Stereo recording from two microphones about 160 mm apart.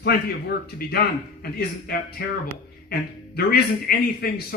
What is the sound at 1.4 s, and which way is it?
Speech, 75° left (ahead or behind).